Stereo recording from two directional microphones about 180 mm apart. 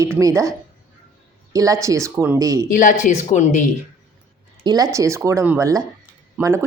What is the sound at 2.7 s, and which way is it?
Speech, 45° left (ahead or behind).